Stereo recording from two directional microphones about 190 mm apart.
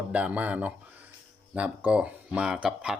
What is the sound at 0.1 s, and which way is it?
Speech, 5° right (ahead or behind).